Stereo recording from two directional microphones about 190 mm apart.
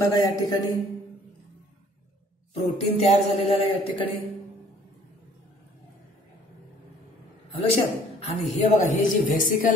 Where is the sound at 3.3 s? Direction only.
30° left (ahead or behind).